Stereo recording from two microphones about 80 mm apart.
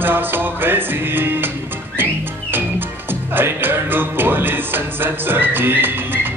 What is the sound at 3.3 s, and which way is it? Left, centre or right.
Music, right.